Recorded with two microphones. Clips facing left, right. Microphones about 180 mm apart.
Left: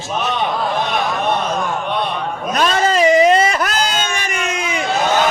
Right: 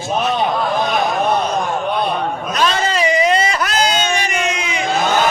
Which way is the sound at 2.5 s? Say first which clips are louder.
Left 3 dB; 45° left (ahead or behind).